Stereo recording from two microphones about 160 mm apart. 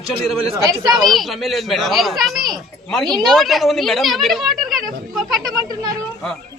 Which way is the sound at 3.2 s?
Centre (ahead or behind).